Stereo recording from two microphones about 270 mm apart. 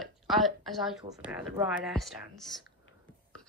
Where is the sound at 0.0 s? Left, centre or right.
Centre.